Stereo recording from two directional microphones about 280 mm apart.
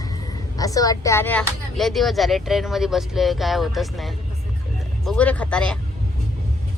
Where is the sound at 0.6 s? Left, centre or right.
Centre.